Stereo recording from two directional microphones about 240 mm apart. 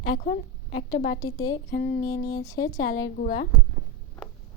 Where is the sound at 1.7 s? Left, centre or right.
Left.